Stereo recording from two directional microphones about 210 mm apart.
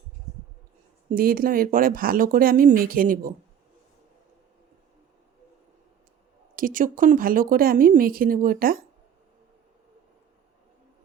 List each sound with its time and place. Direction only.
1.1 s speech: 45° right (ahead or behind)
6.6 s speech: 40° right (ahead or behind)